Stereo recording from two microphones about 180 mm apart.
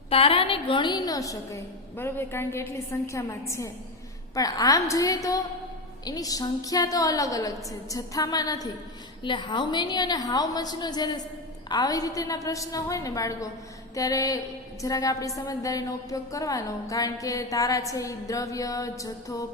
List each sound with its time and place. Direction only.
0.1 s music: 30° left (ahead or behind)
2.0 s a woman's voice: 10° left (ahead or behind)
4.4 s music: 20° left (ahead or behind)